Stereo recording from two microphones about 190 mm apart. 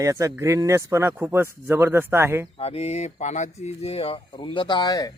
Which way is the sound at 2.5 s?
30° left (ahead or behind).